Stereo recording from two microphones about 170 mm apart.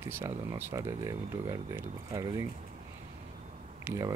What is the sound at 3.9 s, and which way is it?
Speech, 20° right (ahead or behind).